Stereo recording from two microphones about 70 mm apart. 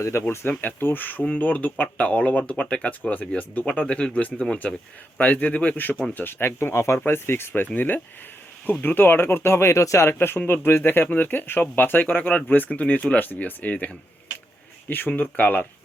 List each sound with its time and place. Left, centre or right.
0.0 s speech: left